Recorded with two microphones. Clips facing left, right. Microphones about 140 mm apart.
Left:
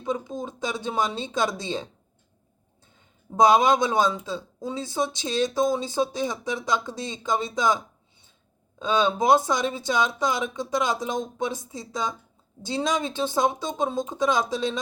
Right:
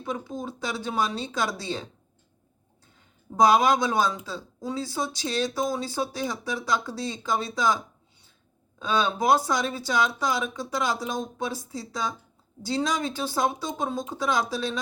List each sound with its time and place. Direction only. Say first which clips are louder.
0.0 s speech: left 3 dB; 20° left (ahead or behind)
3.3 s speech: left 1 dB; 20° left (ahead or behind)
8.8 s speech: left 2 dB; 20° left (ahead or behind)